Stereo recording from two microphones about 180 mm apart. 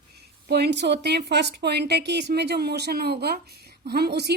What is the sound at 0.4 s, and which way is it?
A woman's voice, 65° right (ahead or behind).